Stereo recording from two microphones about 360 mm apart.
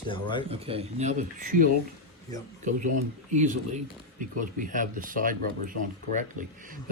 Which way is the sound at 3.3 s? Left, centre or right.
Centre.